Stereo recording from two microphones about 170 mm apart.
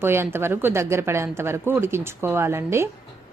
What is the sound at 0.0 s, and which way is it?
Speech, 15° right (ahead or behind).